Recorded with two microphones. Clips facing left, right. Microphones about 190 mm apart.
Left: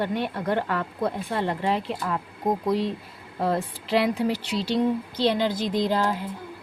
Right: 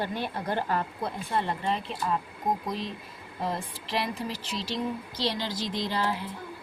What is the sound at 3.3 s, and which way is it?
A woman's voice, 60° left (ahead or behind).